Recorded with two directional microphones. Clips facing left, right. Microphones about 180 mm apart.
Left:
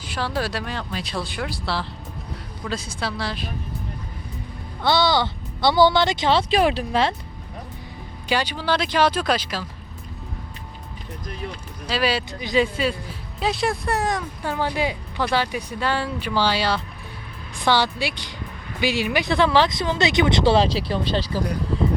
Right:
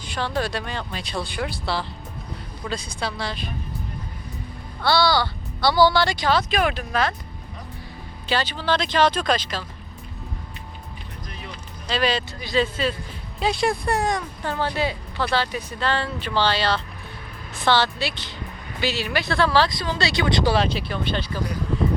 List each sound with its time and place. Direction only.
0.1 s speech: 5° left (ahead or behind)
4.8 s speech: 20° left (ahead or behind)
8.3 s speech: 10° left (ahead or behind)
11.9 s speech: 10° left (ahead or behind)
13.4 s speech: centre (ahead or behind); by 21.4 s 35° left (ahead or behind)